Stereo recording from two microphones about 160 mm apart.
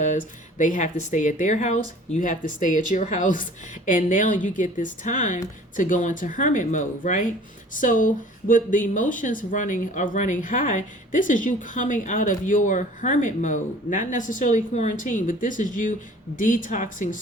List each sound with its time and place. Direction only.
0.6 s speech: 50° left (ahead or behind)